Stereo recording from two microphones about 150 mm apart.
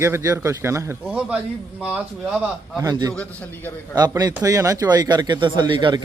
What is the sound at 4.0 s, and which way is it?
Speech, 25° right (ahead or behind).